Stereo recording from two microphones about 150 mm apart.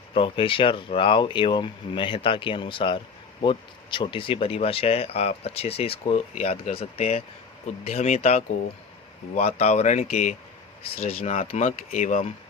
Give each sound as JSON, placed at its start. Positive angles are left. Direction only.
{"t": 0.1, "sound": "speech", "side_deg": 35}
{"t": 10.9, "sound": "speech", "side_deg": 40}